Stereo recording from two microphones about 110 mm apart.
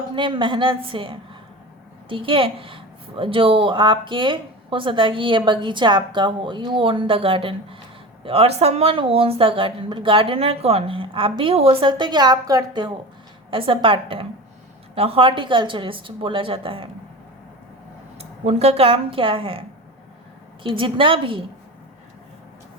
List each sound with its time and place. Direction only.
0.2 s a woman's voice: 50° right (ahead or behind)
13.5 s a woman's voice: 55° right (ahead or behind)
18.2 s speech: 70° right (ahead or behind); by 19.6 s 55° right (ahead or behind)
20.7 s a woman's voice: 50° right (ahead or behind)